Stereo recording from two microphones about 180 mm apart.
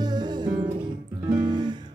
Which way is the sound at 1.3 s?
25° right (ahead or behind).